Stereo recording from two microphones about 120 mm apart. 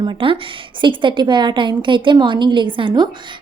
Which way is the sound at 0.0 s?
45° right (ahead or behind).